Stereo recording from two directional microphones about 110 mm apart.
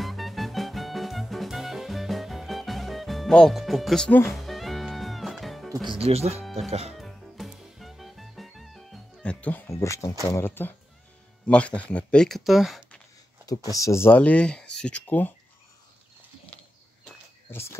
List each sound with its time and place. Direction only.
0.0 s music: centre (ahead or behind)
4.1 s speech: 20° left (ahead or behind)
4.4 s music: centre (ahead or behind)
5.9 s speech: 65° right (ahead or behind)
7.0 s music: centre (ahead or behind)
9.2 s music: 10° left (ahead or behind)
9.7 s speech: 30° left (ahead or behind); by 13.0 s centre (ahead or behind)
13.5 s speech: 35° left (ahead or behind); by 15.3 s 15° left (ahead or behind)
17.5 s speech: 25° left (ahead or behind)